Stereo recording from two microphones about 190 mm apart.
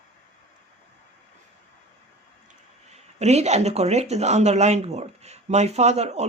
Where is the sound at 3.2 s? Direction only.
35° right (ahead or behind).